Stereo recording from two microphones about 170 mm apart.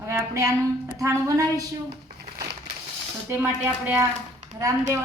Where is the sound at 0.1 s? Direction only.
20° right (ahead or behind).